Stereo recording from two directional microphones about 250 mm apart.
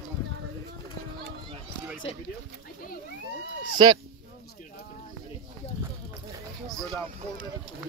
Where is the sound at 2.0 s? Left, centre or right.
Left.